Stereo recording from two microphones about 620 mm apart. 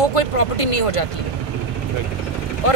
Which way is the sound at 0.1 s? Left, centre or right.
Left.